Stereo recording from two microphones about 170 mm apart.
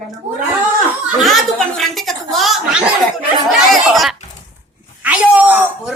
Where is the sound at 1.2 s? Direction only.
Centre (ahead or behind).